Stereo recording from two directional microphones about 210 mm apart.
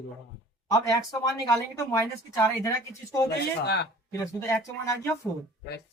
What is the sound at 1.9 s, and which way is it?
Speech, 15° left (ahead or behind).